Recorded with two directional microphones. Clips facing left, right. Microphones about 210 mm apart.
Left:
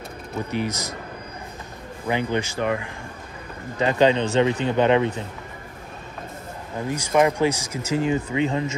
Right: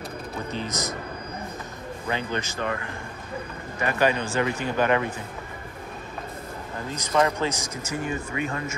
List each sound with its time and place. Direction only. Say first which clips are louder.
0.5 s speech: left 4 dB; 10° left (ahead or behind)
2.0 s speech: left 6 dB; 15° left (ahead or behind)
6.9 s speech: left 4 dB; 10° left (ahead or behind)